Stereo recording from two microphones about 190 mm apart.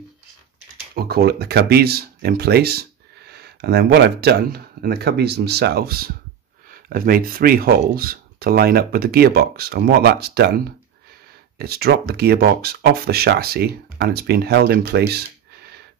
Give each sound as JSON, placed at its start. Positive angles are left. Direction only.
{"t": 0.9, "sound": "speech", "side_deg": -55}
{"t": 11.5, "sound": "speech", "side_deg": -55}